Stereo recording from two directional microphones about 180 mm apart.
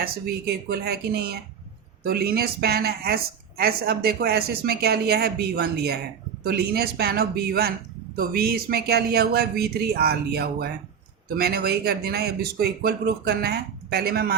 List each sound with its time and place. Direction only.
0.0 s speech: 60° right (ahead or behind)